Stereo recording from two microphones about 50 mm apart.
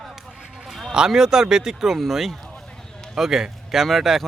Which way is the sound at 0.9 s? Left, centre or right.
Centre.